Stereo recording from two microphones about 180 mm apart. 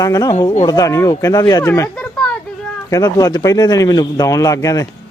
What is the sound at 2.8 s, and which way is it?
A man's voice, 20° left (ahead or behind).